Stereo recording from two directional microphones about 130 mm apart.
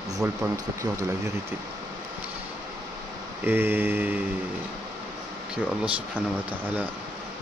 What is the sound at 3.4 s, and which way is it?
Mantra, 15° right (ahead or behind).